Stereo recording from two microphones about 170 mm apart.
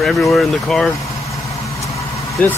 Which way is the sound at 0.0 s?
5° left (ahead or behind).